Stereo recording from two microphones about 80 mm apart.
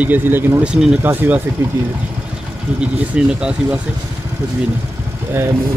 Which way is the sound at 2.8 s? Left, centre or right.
Centre.